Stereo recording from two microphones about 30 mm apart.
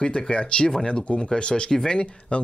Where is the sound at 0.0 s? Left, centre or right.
Left.